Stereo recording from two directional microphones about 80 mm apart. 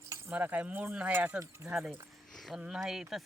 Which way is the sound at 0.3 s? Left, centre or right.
Centre.